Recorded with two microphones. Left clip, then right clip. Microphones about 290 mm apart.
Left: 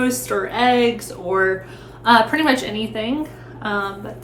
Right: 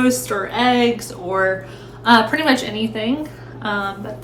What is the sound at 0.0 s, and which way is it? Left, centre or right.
A woman's voice, centre.